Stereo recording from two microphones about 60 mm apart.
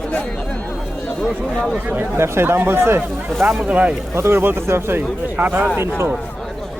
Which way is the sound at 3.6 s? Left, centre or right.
Right.